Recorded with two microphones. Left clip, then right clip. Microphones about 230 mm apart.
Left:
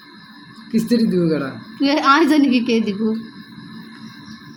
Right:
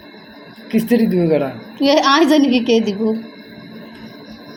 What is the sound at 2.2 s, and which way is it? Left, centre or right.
Speech, left.